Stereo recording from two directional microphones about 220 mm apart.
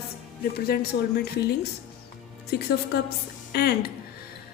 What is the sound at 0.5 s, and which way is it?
A woman's voice, 45° left (ahead or behind).